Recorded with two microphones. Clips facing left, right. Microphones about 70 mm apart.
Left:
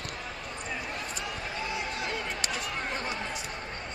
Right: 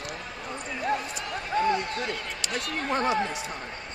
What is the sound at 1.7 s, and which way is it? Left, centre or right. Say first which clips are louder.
Basketball bounce: right 3 dB; centre.